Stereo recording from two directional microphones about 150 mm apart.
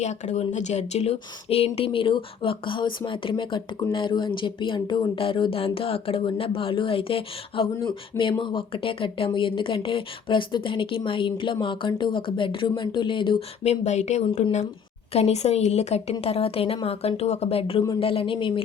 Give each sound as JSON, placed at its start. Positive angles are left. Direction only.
{"t": 0.0, "sound": "a woman's voice", "side_deg": 50}
{"t": 13.8, "sound": "a woman's voice", "side_deg": 50}